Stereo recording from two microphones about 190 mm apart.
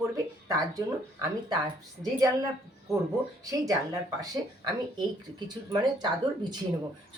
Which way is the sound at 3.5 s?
20° right (ahead or behind).